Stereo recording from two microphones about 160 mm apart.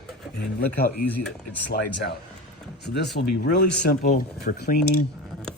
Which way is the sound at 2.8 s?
90° left.